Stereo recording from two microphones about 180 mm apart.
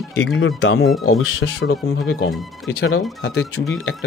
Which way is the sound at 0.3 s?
90° left.